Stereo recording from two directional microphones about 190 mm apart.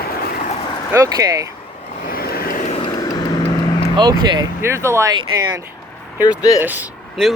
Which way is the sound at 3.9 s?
20° right (ahead or behind).